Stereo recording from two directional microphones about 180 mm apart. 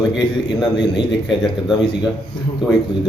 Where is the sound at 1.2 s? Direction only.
Centre (ahead or behind).